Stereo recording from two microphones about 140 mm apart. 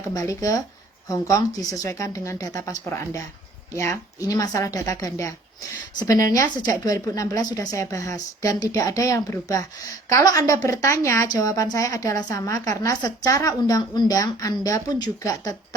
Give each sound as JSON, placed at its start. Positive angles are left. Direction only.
{"t": 0.1, "sound": "a woman's voice", "side_deg": 25}
{"t": 4.3, "sound": "a woman's voice", "side_deg": 25}
{"t": 6.6, "sound": "a woman's voice", "side_deg": 25}